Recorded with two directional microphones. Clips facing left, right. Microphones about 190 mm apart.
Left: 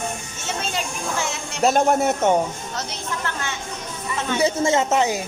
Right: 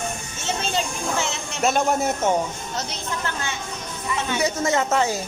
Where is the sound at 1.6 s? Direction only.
40° left (ahead or behind).